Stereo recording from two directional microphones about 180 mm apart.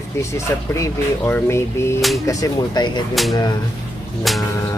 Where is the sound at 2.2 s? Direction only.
20° left (ahead or behind).